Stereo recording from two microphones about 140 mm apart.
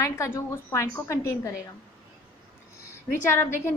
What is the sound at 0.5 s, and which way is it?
A woman's voice, 20° left (ahead or behind).